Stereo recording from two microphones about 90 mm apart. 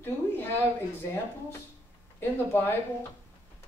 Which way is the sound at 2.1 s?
25° left (ahead or behind).